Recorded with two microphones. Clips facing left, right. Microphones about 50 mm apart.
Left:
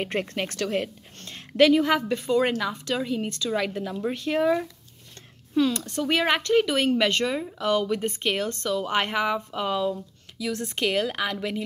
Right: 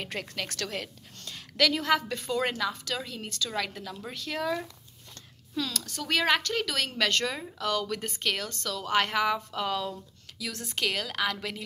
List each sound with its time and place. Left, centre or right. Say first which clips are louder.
0.0 s a woman's voice: left 7 dB; left; by 4.1 s centre
4.1 s speech: left 8 dB; left
4.4 s speech: left 8 dB; centre
5.5 s speech: left 10 dB; left
7.3 s a woman's voice: left 8 dB; centre
7.6 s a woman's voice: left 6 dB; left